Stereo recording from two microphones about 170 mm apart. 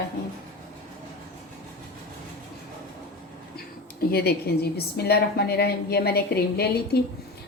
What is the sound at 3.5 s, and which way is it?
A woman's voice, 65° left (ahead or behind).